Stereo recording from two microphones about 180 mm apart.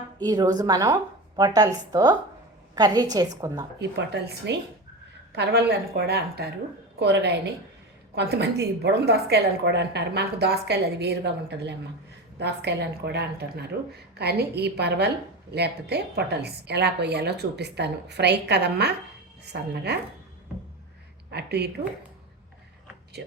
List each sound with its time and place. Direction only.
0.2 s a woman's voice: 20° right (ahead or behind)
3.8 s a woman's voice: 70° right (ahead or behind)
21.2 s a woman's voice: 65° right (ahead or behind)